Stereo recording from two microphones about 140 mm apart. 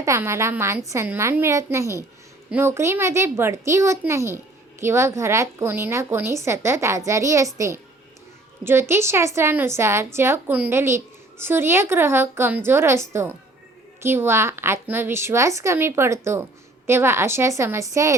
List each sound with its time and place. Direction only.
0.0 s a woman's voice: 20° right (ahead or behind)